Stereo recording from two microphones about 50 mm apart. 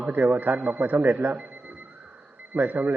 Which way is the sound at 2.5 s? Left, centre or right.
Right.